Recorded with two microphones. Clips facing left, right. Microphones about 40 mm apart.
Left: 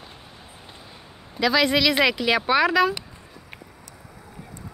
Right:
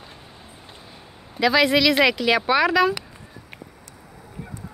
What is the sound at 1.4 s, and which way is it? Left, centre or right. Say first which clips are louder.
Speech: right 2 dB; centre.